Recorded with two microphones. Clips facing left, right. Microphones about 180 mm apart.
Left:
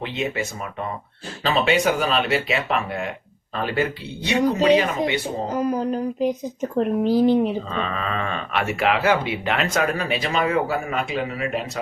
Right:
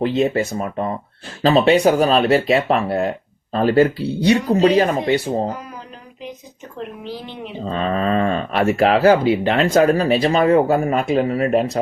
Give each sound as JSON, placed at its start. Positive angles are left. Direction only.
{"t": 0.0, "sound": "speech", "side_deg": -40}
{"t": 5.5, "sound": "speech", "side_deg": 40}
{"t": 7.7, "sound": "speech", "side_deg": -40}